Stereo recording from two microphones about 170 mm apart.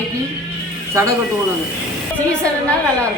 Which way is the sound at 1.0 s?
15° right (ahead or behind).